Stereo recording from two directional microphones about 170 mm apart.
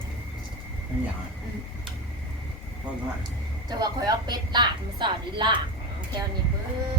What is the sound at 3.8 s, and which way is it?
A woman's voice, 25° right (ahead or behind).